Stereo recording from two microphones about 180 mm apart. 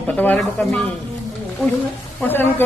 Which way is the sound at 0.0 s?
10° left (ahead or behind).